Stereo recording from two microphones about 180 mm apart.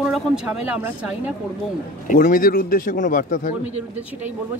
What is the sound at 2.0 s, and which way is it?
A man's voice, 50° left (ahead or behind).